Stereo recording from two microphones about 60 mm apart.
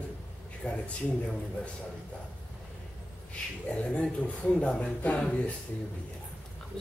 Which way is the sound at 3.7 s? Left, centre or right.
Left.